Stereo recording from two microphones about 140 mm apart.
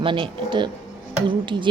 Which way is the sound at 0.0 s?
35° right (ahead or behind).